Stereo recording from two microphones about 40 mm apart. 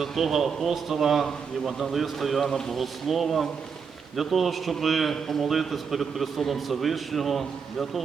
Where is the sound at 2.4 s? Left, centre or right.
Centre.